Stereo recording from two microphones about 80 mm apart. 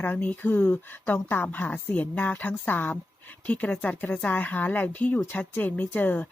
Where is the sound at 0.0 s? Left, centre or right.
Left.